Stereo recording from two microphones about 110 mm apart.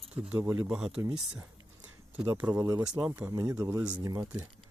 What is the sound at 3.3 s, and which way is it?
Speech, 30° right (ahead or behind).